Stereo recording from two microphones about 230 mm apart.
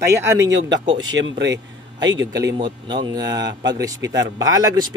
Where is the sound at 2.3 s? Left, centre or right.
Centre.